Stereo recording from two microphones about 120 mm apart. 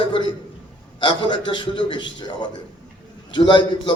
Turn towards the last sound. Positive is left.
turn(degrees=40)  # may be behind; listen again after turning